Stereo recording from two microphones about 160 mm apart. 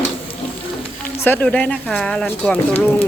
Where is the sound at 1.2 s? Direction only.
10° left (ahead or behind).